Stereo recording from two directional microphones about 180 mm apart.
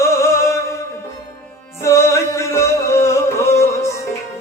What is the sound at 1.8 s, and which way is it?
Music, 15° left (ahead or behind).